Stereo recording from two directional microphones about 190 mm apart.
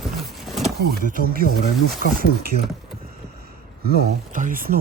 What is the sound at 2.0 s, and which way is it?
Speech, 55° left (ahead or behind).